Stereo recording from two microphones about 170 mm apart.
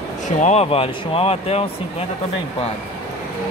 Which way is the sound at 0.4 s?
40° left (ahead or behind).